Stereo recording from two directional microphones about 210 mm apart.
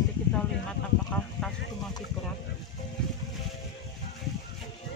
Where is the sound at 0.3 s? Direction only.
5° left (ahead or behind).